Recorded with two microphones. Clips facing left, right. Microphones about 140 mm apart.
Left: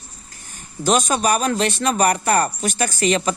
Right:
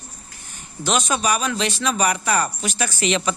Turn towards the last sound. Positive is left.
turn(degrees=40)  # may be behind; listen again after turning